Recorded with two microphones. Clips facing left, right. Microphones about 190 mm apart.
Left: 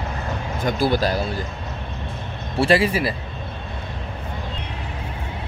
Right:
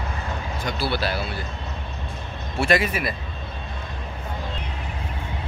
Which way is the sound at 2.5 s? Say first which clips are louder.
Left 4 dB; 30° left (ahead or behind).